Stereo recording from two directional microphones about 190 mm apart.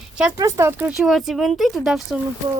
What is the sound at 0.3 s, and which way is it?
Speech, 15° right (ahead or behind).